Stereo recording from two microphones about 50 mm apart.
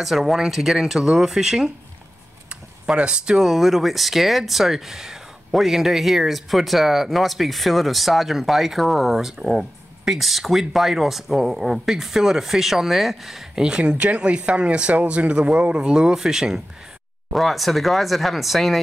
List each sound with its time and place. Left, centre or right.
0.0 s speech: centre
13.6 s speech: centre
17.3 s speech: centre